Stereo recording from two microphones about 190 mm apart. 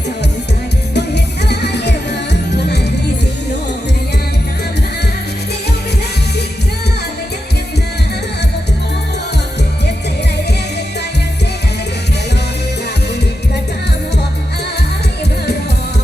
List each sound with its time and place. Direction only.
0.9 s music: 60° left (ahead or behind)